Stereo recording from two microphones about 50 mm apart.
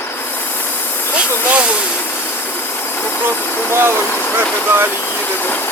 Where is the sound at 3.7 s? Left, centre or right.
Right.